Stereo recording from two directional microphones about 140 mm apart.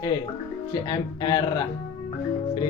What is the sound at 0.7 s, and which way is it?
Speech, 30° left (ahead or behind).